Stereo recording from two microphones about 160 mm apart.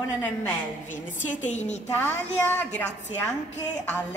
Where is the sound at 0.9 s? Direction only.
50° left (ahead or behind).